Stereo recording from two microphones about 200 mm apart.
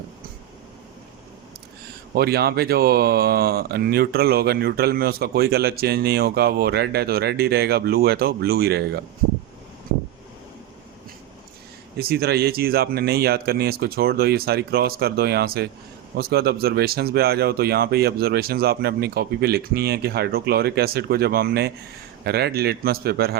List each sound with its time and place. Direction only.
2.1 s speech: 50° right (ahead or behind)
11.9 s speech: 50° right (ahead or behind)